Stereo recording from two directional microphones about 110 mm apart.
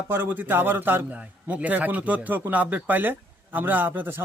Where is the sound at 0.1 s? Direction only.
20° right (ahead or behind).